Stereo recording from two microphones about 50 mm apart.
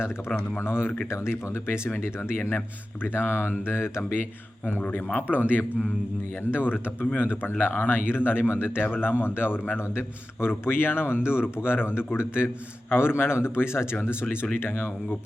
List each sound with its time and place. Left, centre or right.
0.3 s a man's voice: left